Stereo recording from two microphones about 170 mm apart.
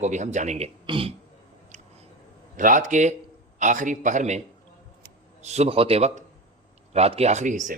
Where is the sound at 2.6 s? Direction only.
50° right (ahead or behind).